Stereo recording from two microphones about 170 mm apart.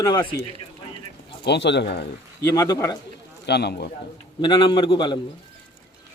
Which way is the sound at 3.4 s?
80° left.